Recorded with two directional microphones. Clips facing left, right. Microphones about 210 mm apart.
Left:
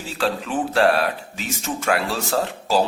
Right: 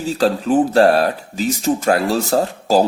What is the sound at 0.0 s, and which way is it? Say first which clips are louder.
Speech: right 7 dB; 40° right (ahead or behind).